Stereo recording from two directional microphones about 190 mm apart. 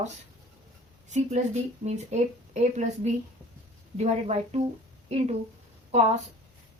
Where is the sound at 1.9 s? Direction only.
40° right (ahead or behind).